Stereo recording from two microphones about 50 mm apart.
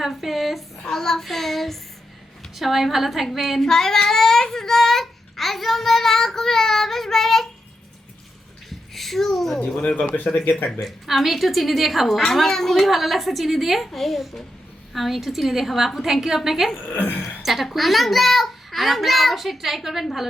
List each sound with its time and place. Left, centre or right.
0.0 s a sound: centre
0.9 s a woman's voice: centre
3.6 s speech: centre
9.0 s a child's voice: centre
9.6 s speech: left
10.7 s a woman's voice: centre
16.7 s speech: left
17.2 s a sound: centre
17.7 s a woman's voice: centre